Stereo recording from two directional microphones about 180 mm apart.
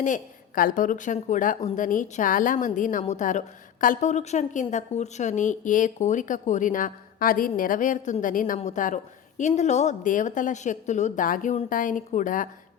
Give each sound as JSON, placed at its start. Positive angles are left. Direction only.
{"t": 0.0, "sound": "a woman's voice", "side_deg": 45}